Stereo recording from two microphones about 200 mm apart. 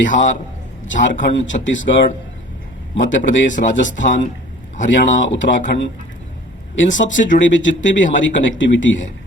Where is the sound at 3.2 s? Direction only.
40° left (ahead or behind).